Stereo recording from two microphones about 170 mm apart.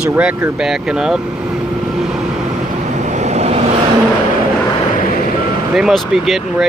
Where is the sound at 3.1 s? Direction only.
40° right (ahead or behind).